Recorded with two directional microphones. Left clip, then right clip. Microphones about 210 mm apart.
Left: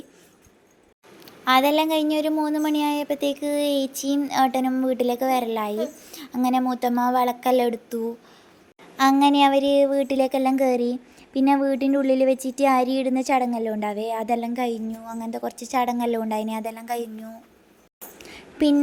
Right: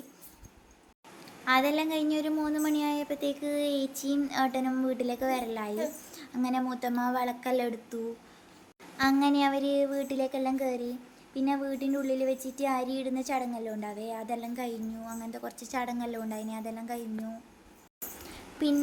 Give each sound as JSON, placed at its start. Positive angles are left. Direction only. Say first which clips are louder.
{"t": 1.2, "sound": "a woman's voice", "louder": "left 7 dB", "side_deg": 30}
{"t": 9.0, "sound": "speech", "louder": "left 9 dB", "side_deg": 30}
{"t": 18.2, "sound": "a sound", "louder": "left 10 dB", "side_deg": 35}